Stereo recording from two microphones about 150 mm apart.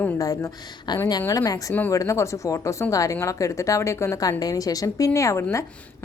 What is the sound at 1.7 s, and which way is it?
A woman's voice, 10° left (ahead or behind).